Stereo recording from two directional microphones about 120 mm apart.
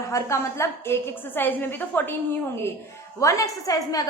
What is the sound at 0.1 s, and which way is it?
A woman's voice, 25° left (ahead or behind).